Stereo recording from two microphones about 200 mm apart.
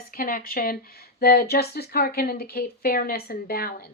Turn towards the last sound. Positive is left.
turn(degrees=50)  # may be behind; listen again after turning